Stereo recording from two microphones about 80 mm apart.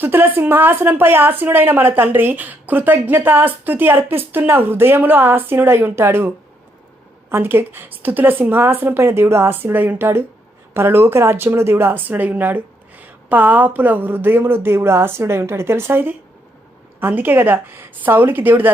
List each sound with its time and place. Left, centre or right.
0.0 s a woman's voice: right